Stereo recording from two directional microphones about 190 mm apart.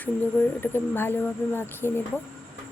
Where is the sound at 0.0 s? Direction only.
10° left (ahead or behind).